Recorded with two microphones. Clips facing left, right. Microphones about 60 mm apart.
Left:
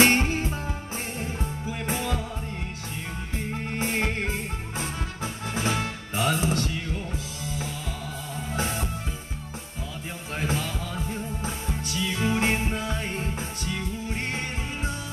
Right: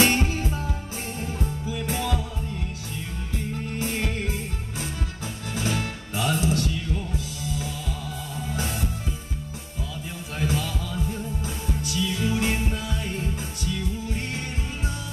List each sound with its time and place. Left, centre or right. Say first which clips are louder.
0.0 s music: left 1 dB; left
3.3 s music: even; left
10.3 s music: right 1 dB; left